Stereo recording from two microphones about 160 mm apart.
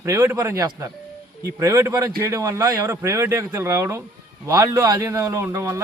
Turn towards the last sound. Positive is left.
turn(degrees=-20)  # may be behind; listen again after turning